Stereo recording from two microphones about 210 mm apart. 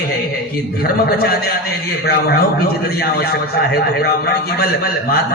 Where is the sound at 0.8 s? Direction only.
45° left (ahead or behind).